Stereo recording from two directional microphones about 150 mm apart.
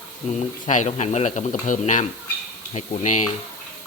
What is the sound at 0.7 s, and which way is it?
A woman's voice, 50° left (ahead or behind).